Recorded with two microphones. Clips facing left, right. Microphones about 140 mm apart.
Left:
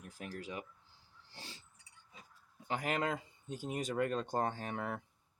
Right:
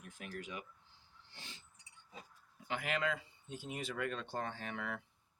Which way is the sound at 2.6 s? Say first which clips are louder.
Left 2 dB; 40° left (ahead or behind).